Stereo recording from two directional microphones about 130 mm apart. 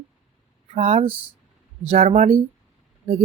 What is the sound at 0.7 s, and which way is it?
Speech, 55° right (ahead or behind).